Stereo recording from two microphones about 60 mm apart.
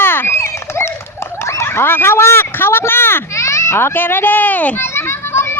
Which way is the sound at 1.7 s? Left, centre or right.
Left.